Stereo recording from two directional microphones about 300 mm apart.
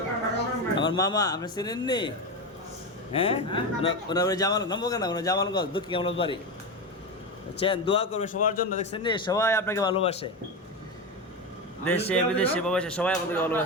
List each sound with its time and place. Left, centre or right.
0.9 s a man's voice: centre
7.6 s a man's voice: centre
11.9 s speech: centre